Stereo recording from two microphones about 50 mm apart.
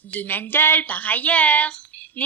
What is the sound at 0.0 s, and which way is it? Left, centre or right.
A woman's voice, left.